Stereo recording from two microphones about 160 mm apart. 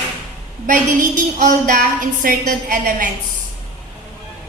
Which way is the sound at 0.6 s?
55° right (ahead or behind).